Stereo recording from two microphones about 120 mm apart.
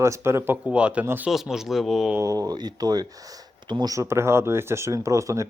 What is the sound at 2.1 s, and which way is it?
Speech, 25° right (ahead or behind).